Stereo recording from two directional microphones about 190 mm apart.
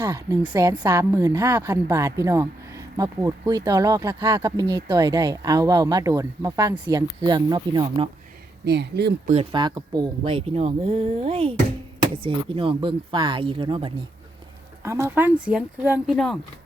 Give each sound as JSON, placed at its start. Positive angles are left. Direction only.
{"t": 0.0, "sound": "a woman's voice", "side_deg": -15}
{"t": 8.6, "sound": "speech", "side_deg": -60}
{"t": 9.2, "sound": "speech", "side_deg": -35}
{"t": 14.8, "sound": "a woman's voice", "side_deg": -15}